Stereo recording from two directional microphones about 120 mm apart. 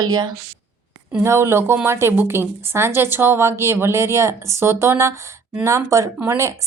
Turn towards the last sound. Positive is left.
turn(degrees=-25)  # may be behind; listen again after turning